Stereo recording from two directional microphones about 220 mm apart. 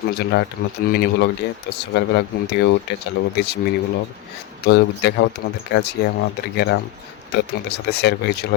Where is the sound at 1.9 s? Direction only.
50° left (ahead or behind).